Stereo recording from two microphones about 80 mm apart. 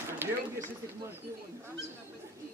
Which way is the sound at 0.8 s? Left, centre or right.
Right.